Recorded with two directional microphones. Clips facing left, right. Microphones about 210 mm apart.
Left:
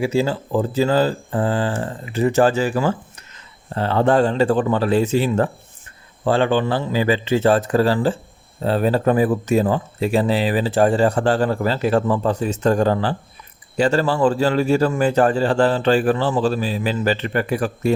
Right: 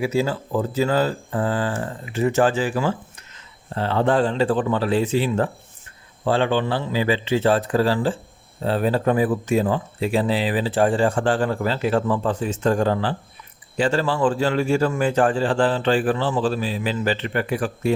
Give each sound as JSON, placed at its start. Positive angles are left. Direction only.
{"t": 0.0, "sound": "speech", "side_deg": 30}